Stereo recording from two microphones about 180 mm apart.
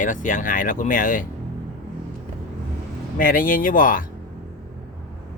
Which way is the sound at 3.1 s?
50° left (ahead or behind).